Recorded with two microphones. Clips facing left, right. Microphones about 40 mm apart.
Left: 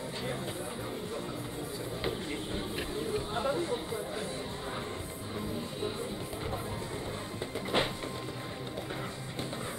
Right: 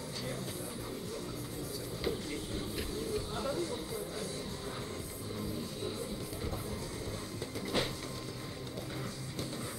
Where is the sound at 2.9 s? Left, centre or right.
Left.